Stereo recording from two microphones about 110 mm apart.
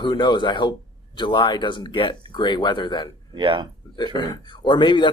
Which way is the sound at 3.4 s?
45° right (ahead or behind).